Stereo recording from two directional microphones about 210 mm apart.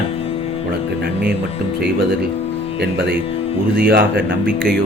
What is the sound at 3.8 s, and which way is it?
Speech, 45° right (ahead or behind).